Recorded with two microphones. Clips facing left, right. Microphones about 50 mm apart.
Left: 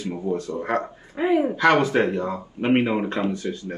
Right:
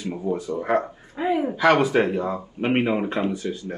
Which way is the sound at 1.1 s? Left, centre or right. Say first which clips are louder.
Left 3 dB; left.